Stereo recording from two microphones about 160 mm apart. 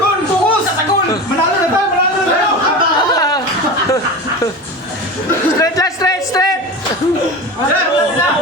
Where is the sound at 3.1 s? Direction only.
25° left (ahead or behind).